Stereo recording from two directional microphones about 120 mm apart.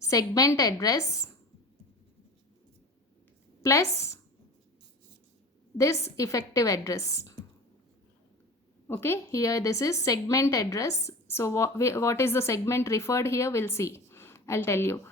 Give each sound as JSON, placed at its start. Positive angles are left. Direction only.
{"t": 0.0, "sound": "a woman's voice", "side_deg": 30}
{"t": 3.6, "sound": "a woman's voice", "side_deg": 25}
{"t": 5.7, "sound": "a woman's voice", "side_deg": 25}
{"t": 8.9, "sound": "a woman's voice", "side_deg": 20}